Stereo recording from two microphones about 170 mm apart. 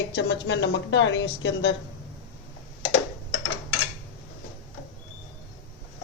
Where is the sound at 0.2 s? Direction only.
90° left.